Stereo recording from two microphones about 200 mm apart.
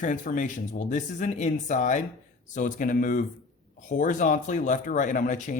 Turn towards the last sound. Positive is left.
turn(degrees=40)  # may be behind; listen again after turning